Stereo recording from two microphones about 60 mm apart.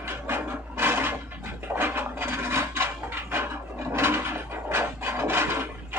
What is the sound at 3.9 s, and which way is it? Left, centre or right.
Wood, right.